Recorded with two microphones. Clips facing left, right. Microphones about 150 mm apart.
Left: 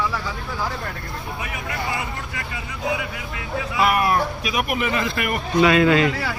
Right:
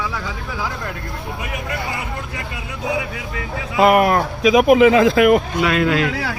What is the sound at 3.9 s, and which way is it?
Speech, 90° right.